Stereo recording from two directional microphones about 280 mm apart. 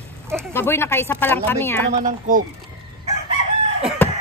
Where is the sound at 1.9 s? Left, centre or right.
Right.